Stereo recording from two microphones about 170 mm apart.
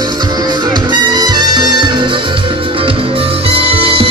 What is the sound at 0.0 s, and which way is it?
Music, 25° right (ahead or behind).